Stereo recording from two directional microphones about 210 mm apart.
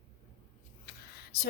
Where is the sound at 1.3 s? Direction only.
50° left (ahead or behind).